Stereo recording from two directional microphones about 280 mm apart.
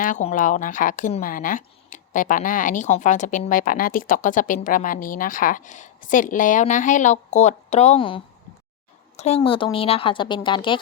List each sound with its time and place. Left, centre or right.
0.0 s a woman's voice: left